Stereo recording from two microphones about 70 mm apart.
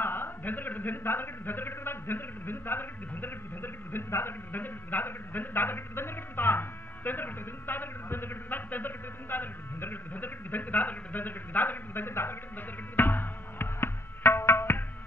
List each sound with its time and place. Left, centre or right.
0.0 s a man's voice: left
12.9 s music: left